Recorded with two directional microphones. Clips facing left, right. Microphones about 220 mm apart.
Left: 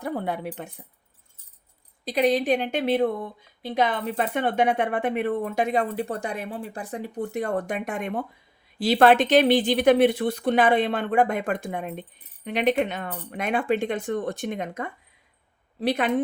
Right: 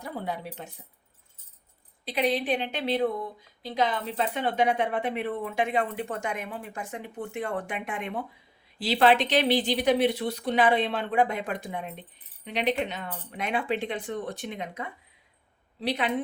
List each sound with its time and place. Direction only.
0.0 s speech: 55° left (ahead or behind)
2.0 s speech: 45° left (ahead or behind)